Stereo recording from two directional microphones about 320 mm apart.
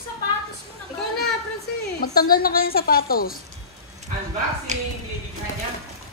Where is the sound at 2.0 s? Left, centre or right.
Left.